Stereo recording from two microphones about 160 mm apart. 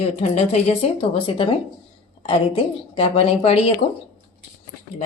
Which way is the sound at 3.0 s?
40° left (ahead or behind).